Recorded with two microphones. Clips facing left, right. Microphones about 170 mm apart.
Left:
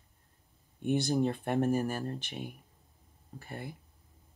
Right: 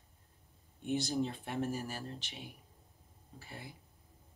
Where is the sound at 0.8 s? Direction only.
60° left (ahead or behind).